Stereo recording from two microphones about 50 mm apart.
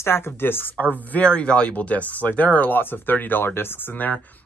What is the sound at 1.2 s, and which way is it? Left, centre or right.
Speech, centre.